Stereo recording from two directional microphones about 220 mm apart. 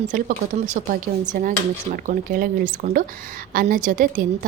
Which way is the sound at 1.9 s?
40° right (ahead or behind).